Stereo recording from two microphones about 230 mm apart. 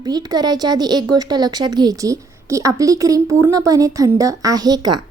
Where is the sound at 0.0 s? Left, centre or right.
Centre.